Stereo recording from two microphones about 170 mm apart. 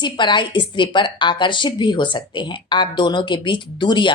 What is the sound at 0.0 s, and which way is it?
A woman's voice, 25° left (ahead or behind).